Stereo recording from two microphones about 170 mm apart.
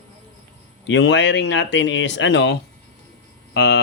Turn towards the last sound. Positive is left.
turn(degrees=85)